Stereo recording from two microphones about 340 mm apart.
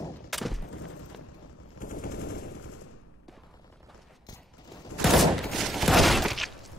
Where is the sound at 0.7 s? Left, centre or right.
Left.